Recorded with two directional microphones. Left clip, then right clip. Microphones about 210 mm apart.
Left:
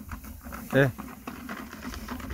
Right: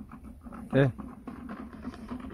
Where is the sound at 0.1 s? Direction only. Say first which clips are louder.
Left 5 dB; 15° left (ahead or behind).